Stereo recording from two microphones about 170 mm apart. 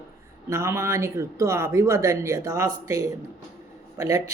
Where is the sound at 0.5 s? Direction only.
15° right (ahead or behind).